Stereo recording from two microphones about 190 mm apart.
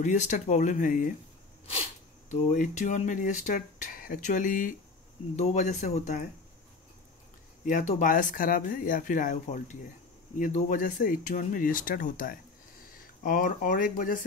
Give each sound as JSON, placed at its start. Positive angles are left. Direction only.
{"t": 0.0, "sound": "speech", "side_deg": 40}
{"t": 7.6, "sound": "speech", "side_deg": 40}